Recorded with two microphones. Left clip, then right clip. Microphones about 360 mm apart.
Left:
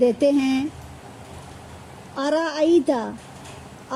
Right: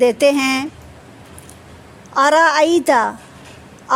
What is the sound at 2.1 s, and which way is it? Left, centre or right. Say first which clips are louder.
Speech: right 11 dB; centre.